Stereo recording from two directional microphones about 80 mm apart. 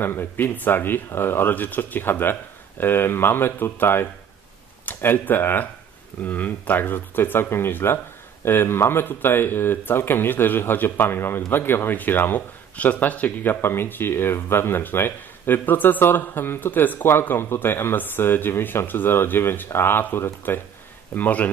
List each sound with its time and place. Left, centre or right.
0.0 s speech: left
21.1 s speech: centre